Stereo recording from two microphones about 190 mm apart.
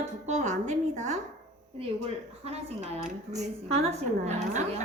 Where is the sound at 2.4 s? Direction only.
35° right (ahead or behind).